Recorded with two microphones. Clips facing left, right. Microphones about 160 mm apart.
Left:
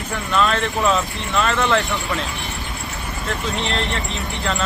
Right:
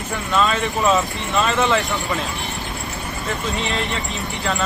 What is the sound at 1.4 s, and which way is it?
Speech, 15° right (ahead or behind).